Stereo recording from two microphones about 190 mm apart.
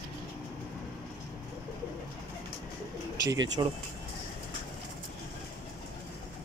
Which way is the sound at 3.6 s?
20° right (ahead or behind).